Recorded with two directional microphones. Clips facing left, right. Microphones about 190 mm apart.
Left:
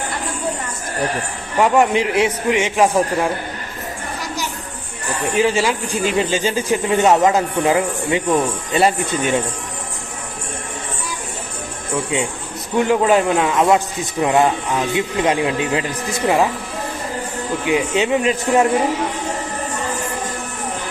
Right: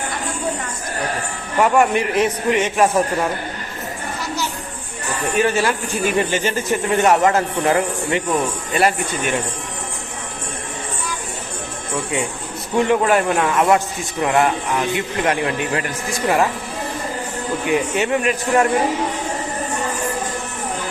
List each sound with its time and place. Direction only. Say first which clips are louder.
1.5 s a man's voice: left 1 dB; 15° left (ahead or behind)
5.4 s a man's voice: left 1 dB; 10° left (ahead or behind)
12.9 s a man's voice: left 3 dB; 15° left (ahead or behind)
17.7 s speech: left 2 dB; 20° left (ahead or behind)